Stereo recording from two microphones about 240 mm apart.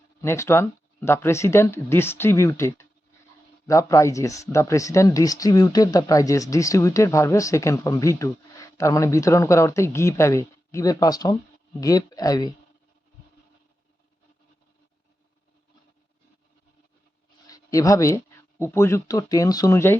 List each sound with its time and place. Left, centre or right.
0.2 s speech: centre
17.4 s a sound: centre
18.6 s speech: centre